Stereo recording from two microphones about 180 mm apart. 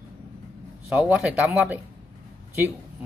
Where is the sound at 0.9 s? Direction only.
5° right (ahead or behind).